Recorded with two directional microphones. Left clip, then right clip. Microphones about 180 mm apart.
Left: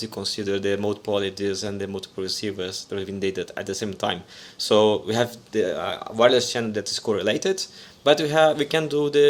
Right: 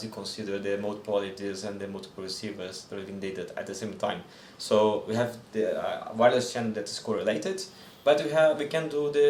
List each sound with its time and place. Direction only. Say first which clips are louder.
0.0 s speech: left 8 dB; 45° left (ahead or behind)